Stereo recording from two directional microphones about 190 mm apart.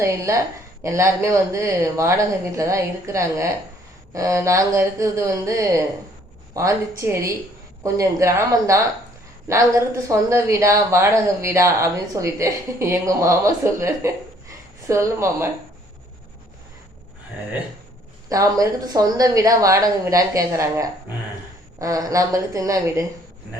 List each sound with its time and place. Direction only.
0.0 s speech: 15° right (ahead or behind)
18.3 s speech: 20° right (ahead or behind)